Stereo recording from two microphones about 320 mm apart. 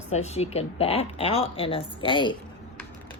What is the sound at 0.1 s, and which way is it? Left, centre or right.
Speech, centre.